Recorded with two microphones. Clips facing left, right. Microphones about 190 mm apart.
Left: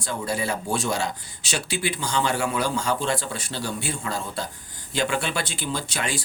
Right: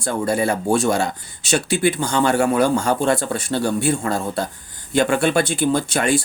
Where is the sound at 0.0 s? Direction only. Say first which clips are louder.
Right 8 dB; 50° right (ahead or behind).